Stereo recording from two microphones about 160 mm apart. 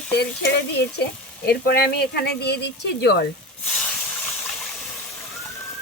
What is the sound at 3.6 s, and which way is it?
Hiss, 5° left (ahead or behind).